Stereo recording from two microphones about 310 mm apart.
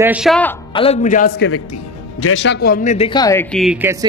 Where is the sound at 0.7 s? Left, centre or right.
Left.